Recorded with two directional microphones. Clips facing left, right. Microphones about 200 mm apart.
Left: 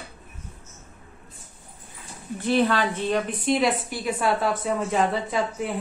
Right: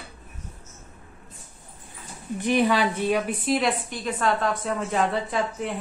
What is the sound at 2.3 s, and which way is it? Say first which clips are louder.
A woman's voice: even; 15° right (ahead or behind).